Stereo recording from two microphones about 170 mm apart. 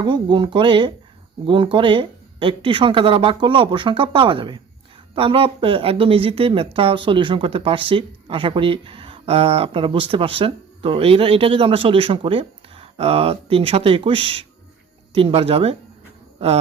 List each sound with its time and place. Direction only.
0.0 s speech: 25° right (ahead or behind)